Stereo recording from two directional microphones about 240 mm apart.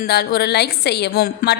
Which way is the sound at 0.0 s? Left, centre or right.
Left.